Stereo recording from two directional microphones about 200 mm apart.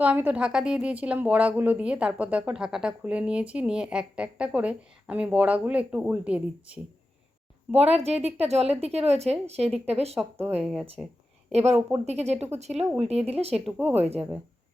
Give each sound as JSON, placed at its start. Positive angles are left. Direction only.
{"t": 0.0, "sound": "a woman's voice", "side_deg": -5}
{"t": 7.7, "sound": "a woman's voice", "side_deg": -30}
{"t": 10.2, "sound": "a woman's voice", "side_deg": -10}
{"t": 12.0, "sound": "a woman's voice", "side_deg": -30}
{"t": 13.7, "sound": "speech", "side_deg": -10}